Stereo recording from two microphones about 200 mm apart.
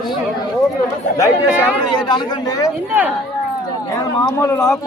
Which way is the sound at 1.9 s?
20° left (ahead or behind).